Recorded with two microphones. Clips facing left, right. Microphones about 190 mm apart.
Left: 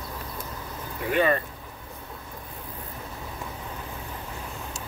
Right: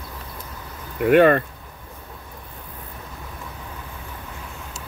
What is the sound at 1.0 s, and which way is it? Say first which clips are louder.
Speech: right 9 dB; 65° right (ahead or behind).